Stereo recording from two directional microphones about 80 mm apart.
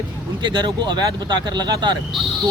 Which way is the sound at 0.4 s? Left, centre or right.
Right.